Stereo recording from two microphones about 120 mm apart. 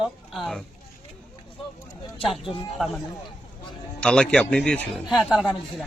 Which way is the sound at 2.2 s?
Centre (ahead or behind).